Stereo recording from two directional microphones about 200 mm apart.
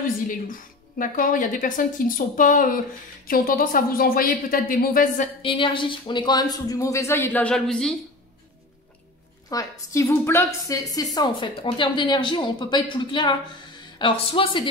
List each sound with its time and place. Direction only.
0.0 s a woman's voice: 40° left (ahead or behind)
5.4 s speech: 25° left (ahead or behind); by 7.9 s 5° left (ahead or behind)
9.5 s a woman's voice: 15° left (ahead or behind)